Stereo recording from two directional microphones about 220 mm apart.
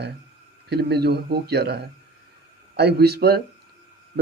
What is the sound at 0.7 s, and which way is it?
Speech, 50° right (ahead or behind).